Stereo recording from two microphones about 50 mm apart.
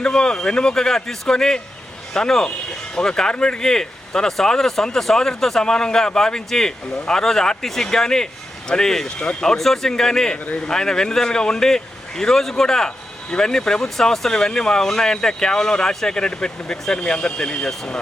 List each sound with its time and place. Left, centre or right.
0.0 s speech: centre
10.4 s speech: left
10.7 s speech: centre